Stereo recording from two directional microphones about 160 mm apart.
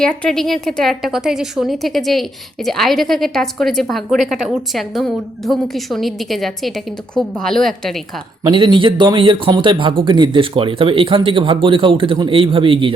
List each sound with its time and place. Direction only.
0.0 s a woman's voice: 5° left (ahead or behind)
8.4 s speech: 30° right (ahead or behind)